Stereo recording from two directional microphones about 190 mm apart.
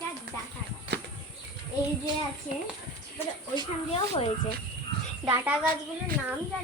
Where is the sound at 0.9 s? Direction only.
60° right (ahead or behind).